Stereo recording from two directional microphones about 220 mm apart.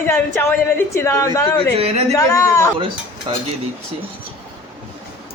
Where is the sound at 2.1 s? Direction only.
15° left (ahead or behind).